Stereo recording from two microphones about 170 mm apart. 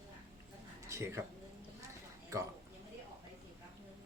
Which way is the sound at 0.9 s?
15° right (ahead or behind).